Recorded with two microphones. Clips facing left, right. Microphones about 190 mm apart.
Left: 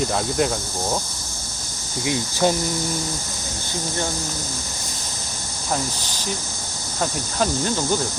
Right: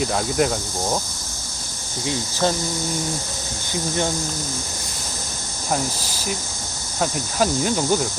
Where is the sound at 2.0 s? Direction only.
15° left (ahead or behind).